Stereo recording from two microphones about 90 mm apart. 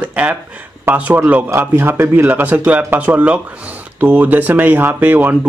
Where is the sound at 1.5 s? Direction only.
30° right (ahead or behind).